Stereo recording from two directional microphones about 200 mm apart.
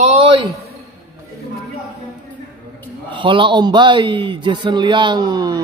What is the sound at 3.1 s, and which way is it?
A man's voice, 25° right (ahead or behind).